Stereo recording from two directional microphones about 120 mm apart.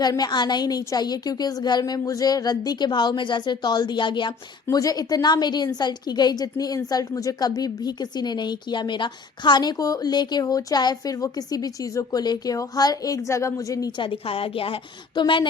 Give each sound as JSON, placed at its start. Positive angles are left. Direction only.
{"t": 0.0, "sound": "a woman's voice", "side_deg": 35}
{"t": 14.0, "sound": "a woman's voice", "side_deg": 50}